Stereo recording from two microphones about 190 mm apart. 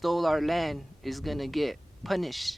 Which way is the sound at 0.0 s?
Centre (ahead or behind).